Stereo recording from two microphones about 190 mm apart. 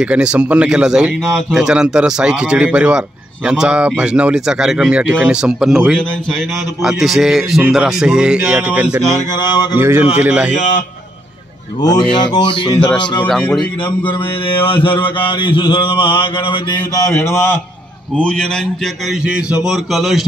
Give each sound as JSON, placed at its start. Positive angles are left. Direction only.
{"t": 0.0, "sound": "speech", "side_deg": -5}
{"t": 9.3, "sound": "mantra", "side_deg": 25}
{"t": 9.8, "sound": "speech", "side_deg": -10}
{"t": 12.1, "sound": "mantra", "side_deg": 25}
{"t": 13.3, "sound": "speech", "side_deg": 0}
{"t": 13.8, "sound": "mantra", "side_deg": 25}
{"t": 18.1, "sound": "speech", "side_deg": 5}
{"t": 19.6, "sound": "speech", "side_deg": 0}